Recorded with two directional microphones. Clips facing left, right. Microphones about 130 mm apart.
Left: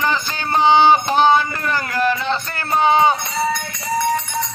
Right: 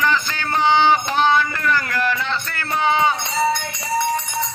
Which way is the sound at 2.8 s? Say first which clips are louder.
Left 4 dB; 30° left (ahead or behind).